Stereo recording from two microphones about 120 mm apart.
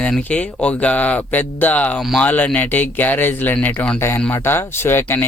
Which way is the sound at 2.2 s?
15° left (ahead or behind).